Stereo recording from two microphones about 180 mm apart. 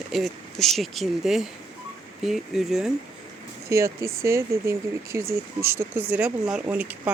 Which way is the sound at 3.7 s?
15° right (ahead or behind).